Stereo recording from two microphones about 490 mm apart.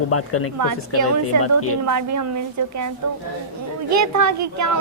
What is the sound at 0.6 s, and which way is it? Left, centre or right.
Speech, right.